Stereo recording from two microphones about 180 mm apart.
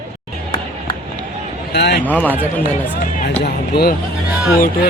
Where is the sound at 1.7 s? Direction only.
70° left (ahead or behind).